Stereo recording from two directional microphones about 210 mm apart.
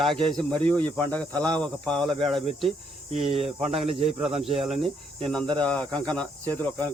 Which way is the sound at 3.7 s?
25° right (ahead or behind).